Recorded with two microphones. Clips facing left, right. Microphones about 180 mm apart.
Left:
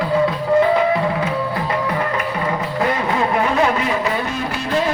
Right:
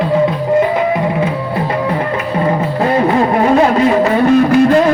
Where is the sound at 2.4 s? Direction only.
35° right (ahead or behind).